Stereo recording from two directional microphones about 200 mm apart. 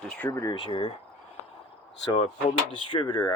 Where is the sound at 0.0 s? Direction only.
5° left (ahead or behind).